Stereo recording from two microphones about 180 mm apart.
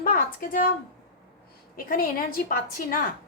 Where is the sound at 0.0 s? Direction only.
50° left (ahead or behind).